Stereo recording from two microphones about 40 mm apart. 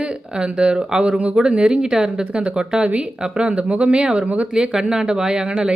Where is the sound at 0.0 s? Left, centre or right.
Right.